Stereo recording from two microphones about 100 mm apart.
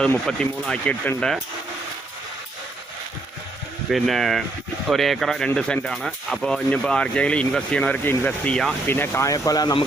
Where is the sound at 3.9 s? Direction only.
Centre (ahead or behind).